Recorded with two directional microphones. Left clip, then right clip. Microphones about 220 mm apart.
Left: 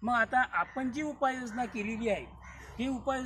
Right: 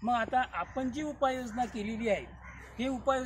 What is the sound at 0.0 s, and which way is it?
Speech, 10° right (ahead or behind).